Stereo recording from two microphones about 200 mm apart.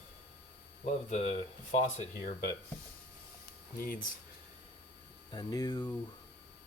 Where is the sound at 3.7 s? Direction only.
45° left (ahead or behind).